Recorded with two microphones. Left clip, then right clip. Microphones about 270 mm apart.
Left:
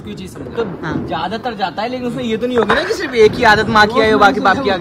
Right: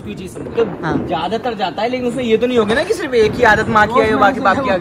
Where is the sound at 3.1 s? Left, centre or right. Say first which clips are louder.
Left 2 dB; left.